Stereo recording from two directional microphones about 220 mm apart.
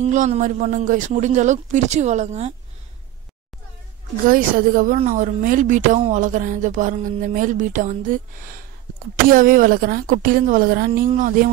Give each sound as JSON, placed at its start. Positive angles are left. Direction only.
{"t": 0.0, "sound": "speech", "side_deg": -35}
{"t": 4.3, "sound": "speech", "side_deg": -40}